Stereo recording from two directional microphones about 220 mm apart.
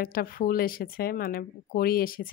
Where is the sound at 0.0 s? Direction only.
40° left (ahead or behind).